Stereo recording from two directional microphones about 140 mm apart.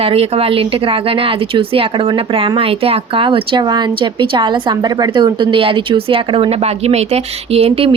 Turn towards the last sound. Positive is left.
turn(degrees=-45)  # may be behind; listen again after turning